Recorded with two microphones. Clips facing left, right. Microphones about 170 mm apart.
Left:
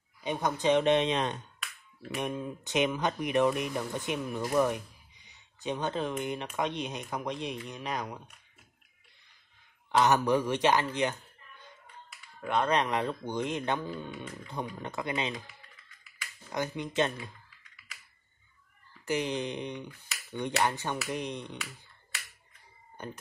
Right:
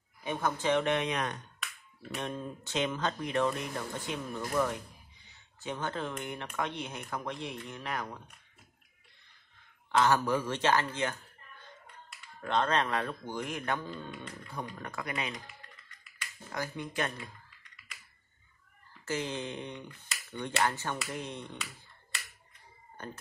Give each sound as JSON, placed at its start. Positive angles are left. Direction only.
{"t": 0.2, "sound": "speech", "side_deg": 20}
{"t": 2.1, "sound": "speech", "side_deg": 10}
{"t": 9.8, "sound": "speech", "side_deg": 20}
{"t": 12.4, "sound": "speech", "side_deg": 10}
{"t": 14.8, "sound": "speech", "side_deg": 20}
{"t": 16.5, "sound": "speech", "side_deg": 20}
{"t": 19.0, "sound": "speech", "side_deg": 15}